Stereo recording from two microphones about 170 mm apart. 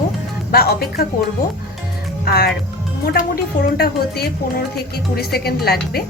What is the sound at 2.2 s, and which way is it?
A woman's voice, 70° left (ahead or behind).